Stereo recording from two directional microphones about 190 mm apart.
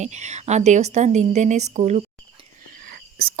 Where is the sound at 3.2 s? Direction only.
50° right (ahead or behind).